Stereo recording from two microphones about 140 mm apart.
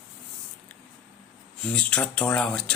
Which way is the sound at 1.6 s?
5° left (ahead or behind).